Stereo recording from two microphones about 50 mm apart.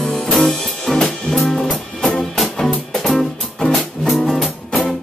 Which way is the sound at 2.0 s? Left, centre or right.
Centre.